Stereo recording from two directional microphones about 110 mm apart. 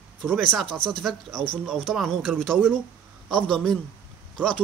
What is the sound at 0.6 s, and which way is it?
Speech, 5° left (ahead or behind).